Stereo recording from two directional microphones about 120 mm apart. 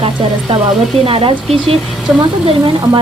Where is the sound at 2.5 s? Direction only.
45° right (ahead or behind).